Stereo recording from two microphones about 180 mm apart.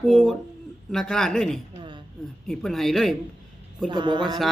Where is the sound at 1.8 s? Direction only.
25° right (ahead or behind).